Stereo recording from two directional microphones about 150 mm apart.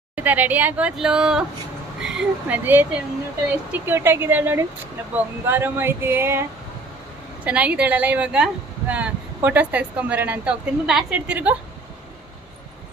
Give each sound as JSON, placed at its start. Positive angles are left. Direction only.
{"t": 0.2, "sound": "speech", "side_deg": -10}
{"t": 7.4, "sound": "speech", "side_deg": -10}